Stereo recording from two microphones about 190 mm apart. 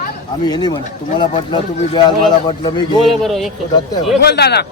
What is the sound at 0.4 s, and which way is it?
Speech, 20° left (ahead or behind).